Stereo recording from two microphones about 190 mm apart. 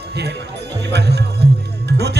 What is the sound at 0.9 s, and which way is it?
Speech, 60° right (ahead or behind).